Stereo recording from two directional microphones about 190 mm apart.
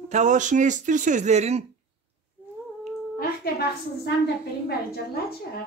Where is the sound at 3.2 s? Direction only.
55° left (ahead or behind).